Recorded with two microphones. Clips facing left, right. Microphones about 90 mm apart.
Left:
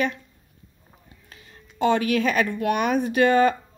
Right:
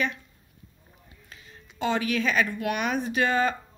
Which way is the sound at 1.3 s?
50° left (ahead or behind).